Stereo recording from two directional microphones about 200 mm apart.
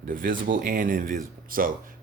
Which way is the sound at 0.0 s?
45° right (ahead or behind).